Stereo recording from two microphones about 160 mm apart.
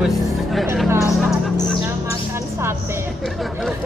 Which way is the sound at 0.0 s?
Centre (ahead or behind).